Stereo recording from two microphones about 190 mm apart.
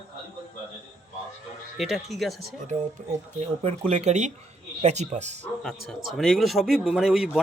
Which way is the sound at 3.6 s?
35° right (ahead or behind).